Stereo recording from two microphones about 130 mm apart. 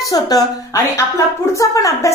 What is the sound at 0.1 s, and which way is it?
A woman's voice, 30° left (ahead or behind).